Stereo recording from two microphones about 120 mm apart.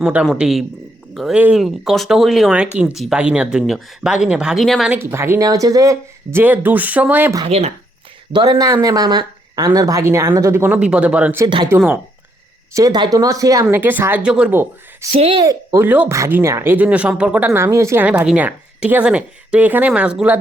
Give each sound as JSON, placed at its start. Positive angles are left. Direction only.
{"t": 0.0, "sound": "speech", "side_deg": -10}
{"t": 4.9, "sound": "speech", "side_deg": -20}
{"t": 6.4, "sound": "speech", "side_deg": -15}
{"t": 7.4, "sound": "speech", "side_deg": -60}
{"t": 8.3, "sound": "speech", "side_deg": -35}
{"t": 11.4, "sound": "speech", "side_deg": -40}
{"t": 12.7, "sound": "speech", "side_deg": -30}
{"t": 13.7, "sound": "speech", "side_deg": -15}
{"t": 15.1, "sound": "speech", "side_deg": -55}
{"t": 15.4, "sound": "speech", "side_deg": -30}
{"t": 15.8, "sound": "speech", "side_deg": -15}
{"t": 17.5, "sound": "speech", "side_deg": -25}
{"t": 18.0, "sound": "speech", "side_deg": -10}